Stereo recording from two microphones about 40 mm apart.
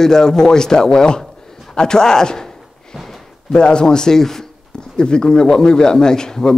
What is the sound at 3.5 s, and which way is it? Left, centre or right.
A man's voice, left.